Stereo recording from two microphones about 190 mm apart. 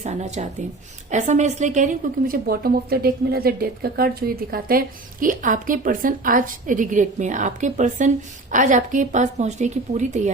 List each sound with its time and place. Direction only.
0.0 s a woman's voice: 35° right (ahead or behind)